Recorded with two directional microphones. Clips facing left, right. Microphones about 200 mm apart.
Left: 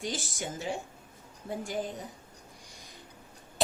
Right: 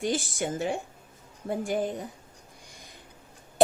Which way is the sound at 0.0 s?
55° right (ahead or behind).